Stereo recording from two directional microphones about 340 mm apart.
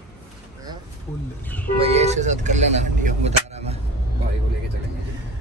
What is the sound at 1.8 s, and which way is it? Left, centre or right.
Speech, centre.